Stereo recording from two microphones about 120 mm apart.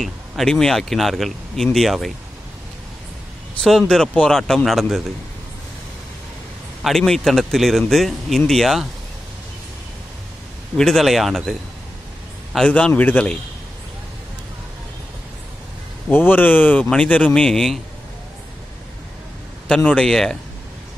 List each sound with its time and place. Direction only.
0.0 s speech: 5° left (ahead or behind)
3.6 s speech: 5° left (ahead or behind)
6.8 s speech: 5° left (ahead or behind)
10.8 s speech: 5° left (ahead or behind)
12.5 s speech: 10° left (ahead or behind)
16.1 s speech: 15° left (ahead or behind)
19.7 s speech: 10° left (ahead or behind)